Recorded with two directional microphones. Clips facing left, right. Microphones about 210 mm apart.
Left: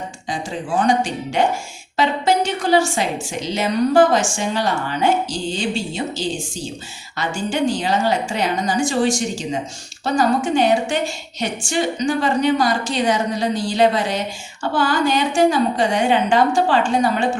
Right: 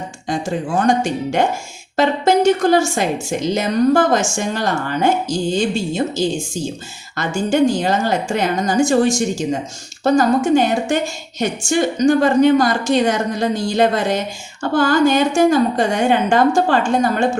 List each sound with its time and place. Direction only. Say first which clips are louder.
0.8 s a woman's voice: right 1 dB; 45° right (ahead or behind)
7.3 s a woman's voice: right 6 dB; 45° right (ahead or behind)